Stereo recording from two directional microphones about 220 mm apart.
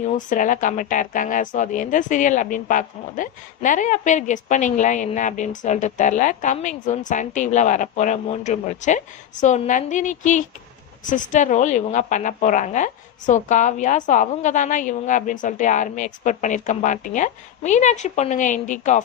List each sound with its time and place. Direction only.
0.0 s speech: 35° left (ahead or behind)